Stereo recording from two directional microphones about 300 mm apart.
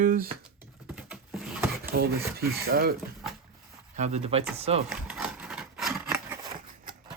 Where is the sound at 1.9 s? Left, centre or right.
Right.